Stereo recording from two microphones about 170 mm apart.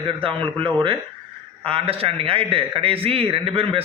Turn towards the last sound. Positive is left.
turn(degrees=-35)  # may be behind; listen again after turning